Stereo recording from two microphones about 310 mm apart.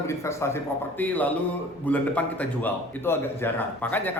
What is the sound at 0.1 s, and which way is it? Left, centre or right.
A man's voice, centre.